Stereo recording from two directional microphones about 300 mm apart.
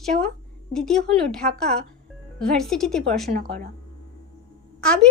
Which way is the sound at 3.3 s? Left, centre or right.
Right.